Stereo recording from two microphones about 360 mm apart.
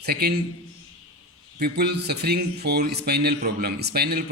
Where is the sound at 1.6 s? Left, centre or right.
Right.